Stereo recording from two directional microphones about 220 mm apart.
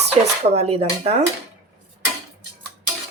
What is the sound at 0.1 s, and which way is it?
Speech, 25° right (ahead or behind).